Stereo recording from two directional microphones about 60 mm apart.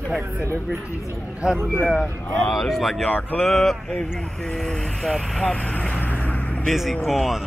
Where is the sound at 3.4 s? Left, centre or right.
Centre.